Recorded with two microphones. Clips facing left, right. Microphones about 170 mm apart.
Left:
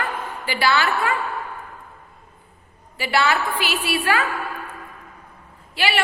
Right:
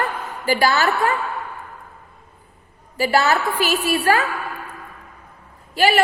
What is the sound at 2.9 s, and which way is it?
A woman's voice, 40° right (ahead or behind).